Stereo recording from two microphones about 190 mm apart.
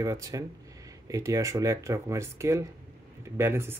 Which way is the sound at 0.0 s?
15° right (ahead or behind).